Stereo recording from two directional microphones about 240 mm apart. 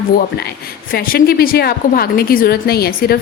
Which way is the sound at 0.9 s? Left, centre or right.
Left.